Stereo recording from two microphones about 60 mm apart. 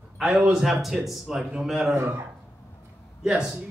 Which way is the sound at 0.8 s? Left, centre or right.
Centre.